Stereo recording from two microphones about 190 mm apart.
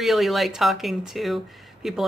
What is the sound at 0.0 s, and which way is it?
Speech, centre (ahead or behind).